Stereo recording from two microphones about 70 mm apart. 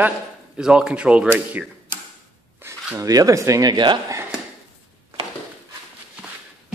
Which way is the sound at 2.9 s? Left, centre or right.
Right.